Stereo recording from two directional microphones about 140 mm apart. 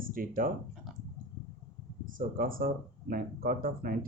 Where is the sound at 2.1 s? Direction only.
90° right.